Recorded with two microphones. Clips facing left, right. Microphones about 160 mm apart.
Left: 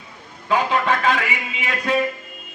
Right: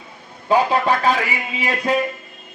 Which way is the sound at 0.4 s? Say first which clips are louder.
Right 3 dB; 35° right (ahead or behind).